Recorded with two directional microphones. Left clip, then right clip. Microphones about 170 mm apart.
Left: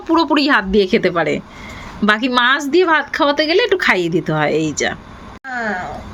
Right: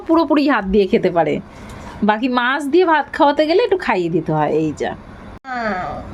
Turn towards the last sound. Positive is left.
turn(degrees=-40)  # may be behind; listen again after turning